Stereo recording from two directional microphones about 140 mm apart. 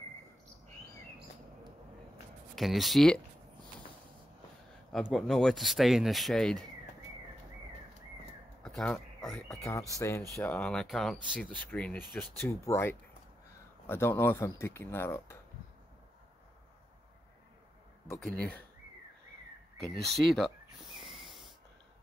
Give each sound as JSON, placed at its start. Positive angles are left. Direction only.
{"t": 2.5, "sound": "speech", "side_deg": 0}
{"t": 5.1, "sound": "speech", "side_deg": 0}
{"t": 8.6, "sound": "a sound", "side_deg": 5}
{"t": 9.5, "sound": "speech", "side_deg": 20}
{"t": 18.2, "sound": "speech", "side_deg": 10}
{"t": 20.0, "sound": "speech", "side_deg": 0}